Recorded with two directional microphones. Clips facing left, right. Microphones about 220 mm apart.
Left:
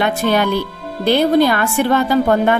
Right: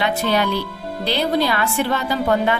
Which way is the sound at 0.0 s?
50° left (ahead or behind).